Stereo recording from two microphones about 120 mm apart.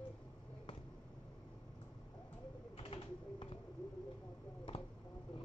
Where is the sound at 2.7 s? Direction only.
55° left (ahead or behind).